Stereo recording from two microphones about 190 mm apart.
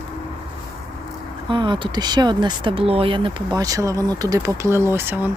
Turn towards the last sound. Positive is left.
turn(degrees=-10)  # may be behind; listen again after turning